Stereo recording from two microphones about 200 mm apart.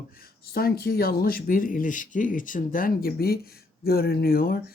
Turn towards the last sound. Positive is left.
turn(degrees=50)  # may be behind; listen again after turning